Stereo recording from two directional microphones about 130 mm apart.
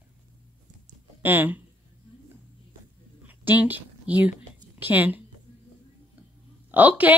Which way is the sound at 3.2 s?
15° right (ahead or behind).